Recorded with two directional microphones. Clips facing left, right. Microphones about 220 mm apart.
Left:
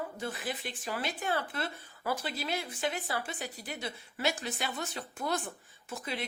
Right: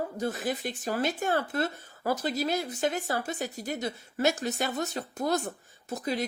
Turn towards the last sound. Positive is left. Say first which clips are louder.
# right 7 dB
turn(degrees=-40)  # may be behind; listen again after turning